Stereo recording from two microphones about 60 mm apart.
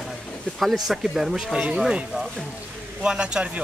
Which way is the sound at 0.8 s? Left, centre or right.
Centre.